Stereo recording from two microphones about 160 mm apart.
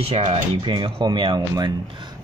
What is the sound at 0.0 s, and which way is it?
Speech, 40° right (ahead or behind).